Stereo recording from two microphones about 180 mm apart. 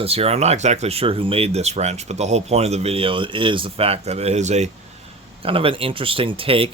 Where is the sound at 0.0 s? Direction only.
35° right (ahead or behind).